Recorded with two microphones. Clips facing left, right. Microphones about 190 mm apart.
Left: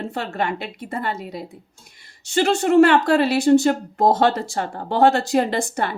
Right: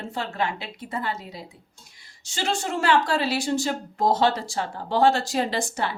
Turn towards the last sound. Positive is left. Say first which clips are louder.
# left 4 dB
turn(degrees=55)  # may be behind; listen again after turning